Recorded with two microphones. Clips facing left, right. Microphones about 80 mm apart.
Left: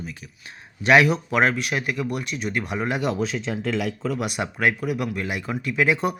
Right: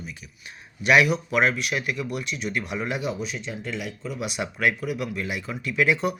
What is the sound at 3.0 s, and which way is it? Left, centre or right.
Speech, left.